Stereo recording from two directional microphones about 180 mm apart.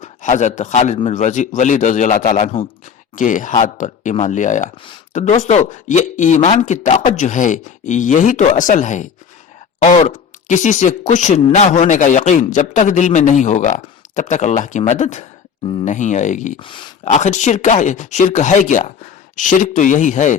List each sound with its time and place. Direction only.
0.0 s a man's voice: 40° left (ahead or behind)
16.6 s speech: 30° left (ahead or behind)
17.1 s a man's voice: 40° left (ahead or behind)